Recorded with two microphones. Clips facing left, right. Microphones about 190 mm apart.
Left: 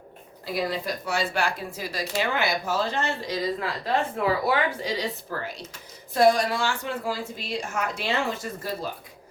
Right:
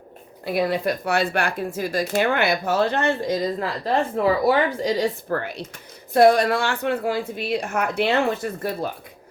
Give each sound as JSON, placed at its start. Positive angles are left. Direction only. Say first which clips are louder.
{"t": 0.4, "sound": "speech", "louder": "right 6 dB", "side_deg": -60}